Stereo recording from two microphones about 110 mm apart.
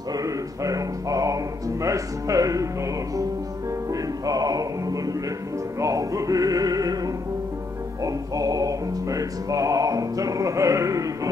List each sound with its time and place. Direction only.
0.1 s music: 30° right (ahead or behind)
3.9 s music: 35° right (ahead or behind)
8.0 s music: 35° right (ahead or behind)